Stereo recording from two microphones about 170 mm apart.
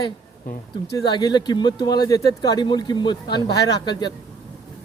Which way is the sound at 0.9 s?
25° left (ahead or behind).